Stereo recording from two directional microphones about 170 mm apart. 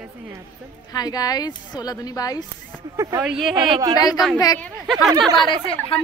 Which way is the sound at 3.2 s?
Centre (ahead or behind).